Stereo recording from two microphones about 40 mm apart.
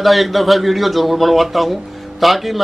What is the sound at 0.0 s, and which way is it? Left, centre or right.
Speech, centre.